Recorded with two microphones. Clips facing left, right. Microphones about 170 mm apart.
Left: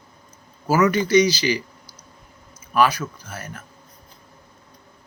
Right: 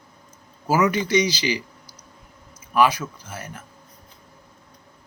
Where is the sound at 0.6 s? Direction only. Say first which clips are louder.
Left 2 dB; 15° right (ahead or behind).